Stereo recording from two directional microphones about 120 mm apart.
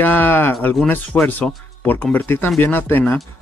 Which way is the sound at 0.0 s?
15° left (ahead or behind).